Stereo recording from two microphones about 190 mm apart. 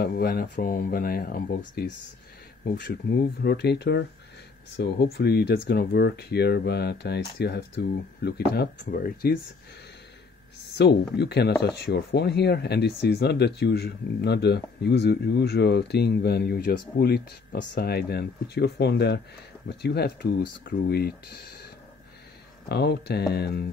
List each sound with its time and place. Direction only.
0.0 s speech: 55° left (ahead or behind)
10.8 s speech: 60° left (ahead or behind)
22.7 s speech: 60° left (ahead or behind)